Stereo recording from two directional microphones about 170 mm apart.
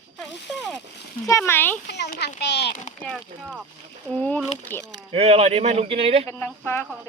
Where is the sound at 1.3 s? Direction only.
15° left (ahead or behind).